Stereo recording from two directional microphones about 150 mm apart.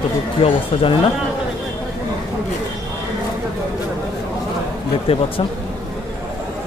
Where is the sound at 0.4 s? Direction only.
40° left (ahead or behind).